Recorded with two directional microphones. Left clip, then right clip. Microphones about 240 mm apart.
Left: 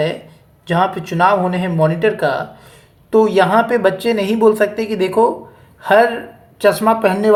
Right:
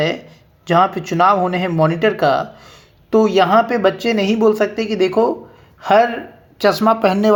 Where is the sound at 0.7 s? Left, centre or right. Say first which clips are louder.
Right 2 dB; right.